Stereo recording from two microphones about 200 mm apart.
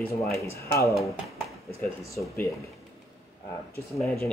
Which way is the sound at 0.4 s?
15° left (ahead or behind).